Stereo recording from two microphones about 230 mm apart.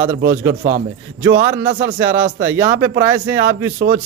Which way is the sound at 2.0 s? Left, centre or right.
Centre.